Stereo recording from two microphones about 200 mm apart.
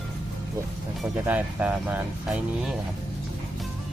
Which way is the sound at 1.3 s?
5° right (ahead or behind).